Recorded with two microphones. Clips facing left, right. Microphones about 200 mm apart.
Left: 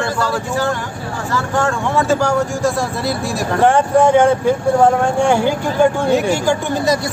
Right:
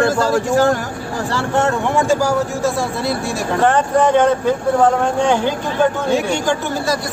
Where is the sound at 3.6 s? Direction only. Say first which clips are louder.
Left 2 dB; 10° left (ahead or behind).